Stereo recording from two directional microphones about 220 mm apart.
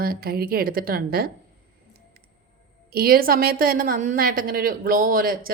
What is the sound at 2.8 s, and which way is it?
A woman's voice, 45° right (ahead or behind).